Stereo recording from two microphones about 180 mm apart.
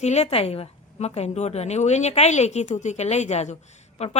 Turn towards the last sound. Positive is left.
turn(degrees=35)  # may be behind; listen again after turning